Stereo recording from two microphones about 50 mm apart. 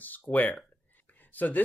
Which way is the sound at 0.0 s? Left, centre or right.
Left.